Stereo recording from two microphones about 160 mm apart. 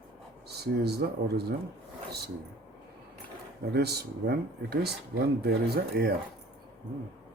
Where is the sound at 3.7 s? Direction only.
90° right.